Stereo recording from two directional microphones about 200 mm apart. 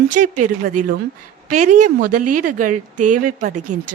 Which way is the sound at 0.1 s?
40° right (ahead or behind).